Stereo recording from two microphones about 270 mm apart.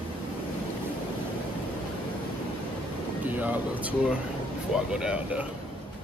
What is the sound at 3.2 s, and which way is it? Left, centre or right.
Speech, centre.